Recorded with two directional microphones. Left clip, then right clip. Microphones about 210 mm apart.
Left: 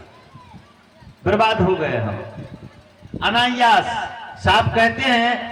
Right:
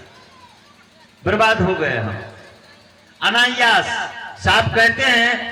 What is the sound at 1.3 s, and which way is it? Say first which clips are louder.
Speech: right 1 dB; 45° left (ahead or behind).